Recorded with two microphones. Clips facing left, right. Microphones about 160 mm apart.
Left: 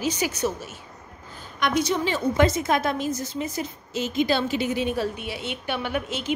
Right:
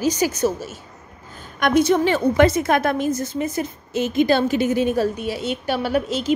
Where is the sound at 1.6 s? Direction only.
50° right (ahead or behind).